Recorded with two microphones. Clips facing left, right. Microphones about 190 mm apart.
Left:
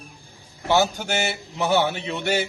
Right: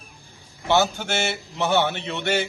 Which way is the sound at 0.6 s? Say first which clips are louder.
Even; 10° left (ahead or behind).